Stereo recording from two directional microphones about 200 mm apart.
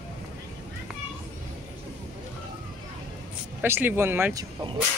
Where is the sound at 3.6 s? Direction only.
10° right (ahead or behind).